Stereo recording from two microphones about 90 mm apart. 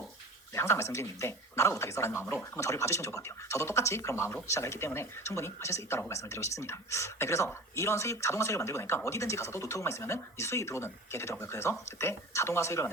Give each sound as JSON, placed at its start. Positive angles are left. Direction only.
{"t": 0.5, "sound": "speech", "side_deg": 30}